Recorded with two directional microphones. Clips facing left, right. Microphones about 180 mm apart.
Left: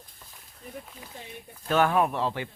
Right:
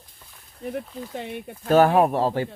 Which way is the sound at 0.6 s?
70° right (ahead or behind).